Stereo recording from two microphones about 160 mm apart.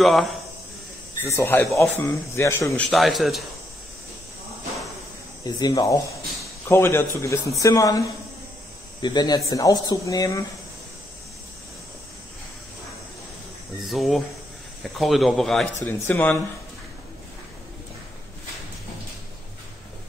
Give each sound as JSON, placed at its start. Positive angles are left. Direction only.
{"t": 0.0, "sound": "speech", "side_deg": 0}
{"t": 1.2, "sound": "speech", "side_deg": 15}
{"t": 2.8, "sound": "speech", "side_deg": 0}
{"t": 5.4, "sound": "speech", "side_deg": 20}
{"t": 13.8, "sound": "speech", "side_deg": 0}